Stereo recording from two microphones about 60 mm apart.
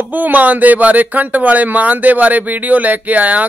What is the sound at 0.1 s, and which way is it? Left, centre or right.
Speech, right.